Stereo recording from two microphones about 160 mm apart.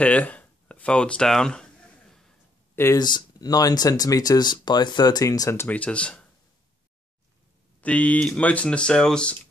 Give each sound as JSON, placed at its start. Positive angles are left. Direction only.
{"t": 0.0, "sound": "a sound", "side_deg": 10}
{"t": 2.7, "sound": "speech", "side_deg": 15}
{"t": 3.0, "sound": "speech", "side_deg": 25}
{"t": 7.8, "sound": "speech", "side_deg": 10}